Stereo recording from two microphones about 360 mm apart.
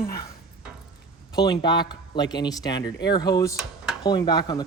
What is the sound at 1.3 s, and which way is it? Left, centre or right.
Speech, centre.